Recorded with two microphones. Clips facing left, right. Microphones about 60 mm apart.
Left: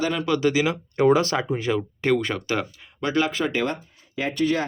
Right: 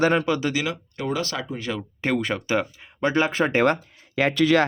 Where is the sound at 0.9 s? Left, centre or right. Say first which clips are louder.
Left 11 dB; left.